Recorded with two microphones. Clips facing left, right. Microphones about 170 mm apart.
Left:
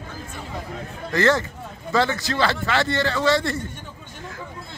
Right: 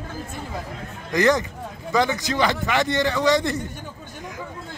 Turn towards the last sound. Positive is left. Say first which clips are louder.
# right 1 dB
turn(degrees=-15)  # may be behind; listen again after turning